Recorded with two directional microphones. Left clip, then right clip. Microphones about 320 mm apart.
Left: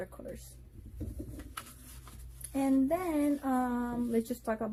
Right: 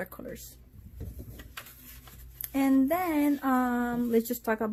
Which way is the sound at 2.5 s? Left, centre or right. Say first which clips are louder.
Right 4 dB; right.